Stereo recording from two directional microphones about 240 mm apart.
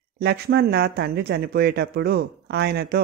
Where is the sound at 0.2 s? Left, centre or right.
Right.